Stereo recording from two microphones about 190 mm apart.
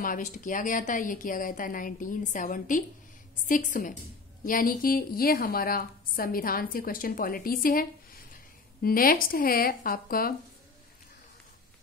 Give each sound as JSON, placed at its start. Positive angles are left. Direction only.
{"t": 0.0, "sound": "a woman's voice", "side_deg": 45}